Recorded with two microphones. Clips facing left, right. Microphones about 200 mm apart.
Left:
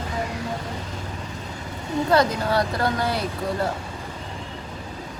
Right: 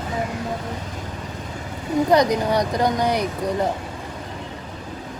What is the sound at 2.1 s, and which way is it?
Speech, 15° right (ahead or behind).